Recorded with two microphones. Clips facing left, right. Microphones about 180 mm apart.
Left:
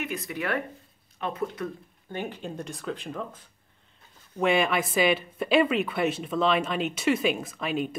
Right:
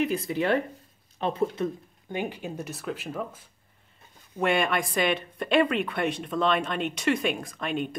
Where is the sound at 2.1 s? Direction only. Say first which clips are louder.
Right 2 dB; 10° right (ahead or behind).